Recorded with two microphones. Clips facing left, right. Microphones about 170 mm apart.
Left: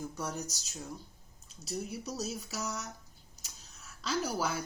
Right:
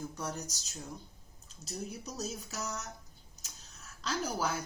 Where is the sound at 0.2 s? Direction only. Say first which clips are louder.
Left 2 dB; 10° left (ahead or behind).